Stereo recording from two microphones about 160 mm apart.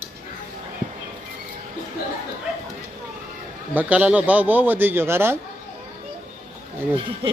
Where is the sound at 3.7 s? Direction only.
10° right (ahead or behind).